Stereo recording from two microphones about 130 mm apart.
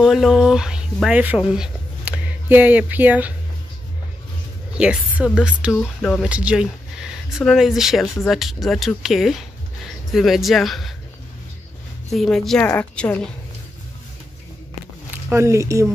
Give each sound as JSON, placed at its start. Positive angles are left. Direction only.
{"t": 0.0, "sound": "a woman's voice", "side_deg": 0}
{"t": 4.7, "sound": "a woman's voice", "side_deg": -10}
{"t": 5.8, "sound": "speech", "side_deg": 5}
{"t": 6.2, "sound": "speech", "side_deg": -10}
{"t": 12.1, "sound": "speech", "side_deg": 0}
{"t": 15.2, "sound": "speech", "side_deg": -20}